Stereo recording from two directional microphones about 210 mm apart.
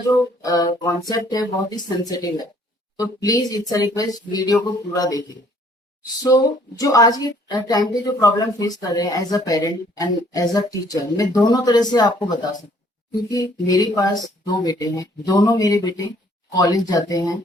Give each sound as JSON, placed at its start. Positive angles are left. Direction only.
{"t": 0.1, "sound": "a woman's voice", "side_deg": 20}
{"t": 6.2, "sound": "a woman's voice", "side_deg": 15}